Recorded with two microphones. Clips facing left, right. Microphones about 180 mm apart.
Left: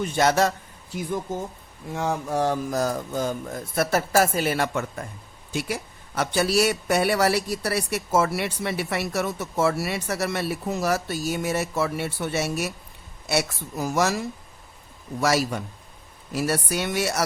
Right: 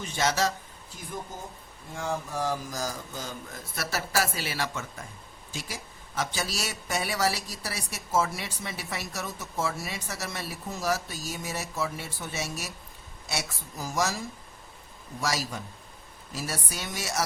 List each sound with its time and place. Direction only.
0.0 s a man's voice: 55° left (ahead or behind)
1.9 s a man's voice: 70° left (ahead or behind)
15.2 s a man's voice: 65° left (ahead or behind)